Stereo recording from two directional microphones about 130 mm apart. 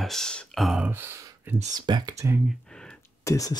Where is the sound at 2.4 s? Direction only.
5° left (ahead or behind).